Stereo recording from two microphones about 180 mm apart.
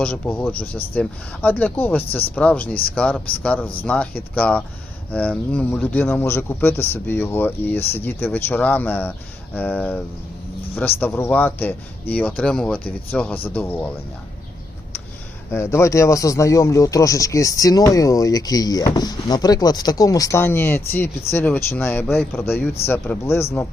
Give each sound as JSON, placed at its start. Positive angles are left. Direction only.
{"t": 0.0, "sound": "speech", "side_deg": 5}
{"t": 15.5, "sound": "speech", "side_deg": 15}